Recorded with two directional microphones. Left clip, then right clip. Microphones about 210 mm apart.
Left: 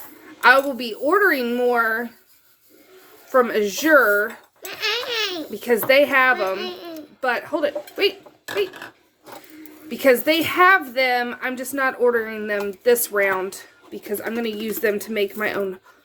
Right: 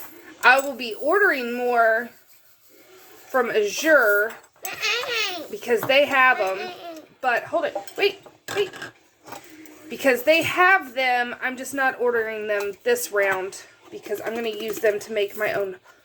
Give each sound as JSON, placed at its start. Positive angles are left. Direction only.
{"t": 0.4, "sound": "a woman's voice", "side_deg": 35}
{"t": 3.3, "sound": "speech", "side_deg": 35}
{"t": 10.0, "sound": "a woman's voice", "side_deg": 30}
{"t": 14.1, "sound": "speech", "side_deg": 45}